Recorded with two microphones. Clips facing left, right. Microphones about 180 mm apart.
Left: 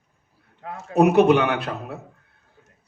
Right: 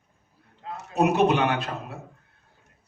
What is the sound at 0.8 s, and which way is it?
A man's voice, 65° left (ahead or behind).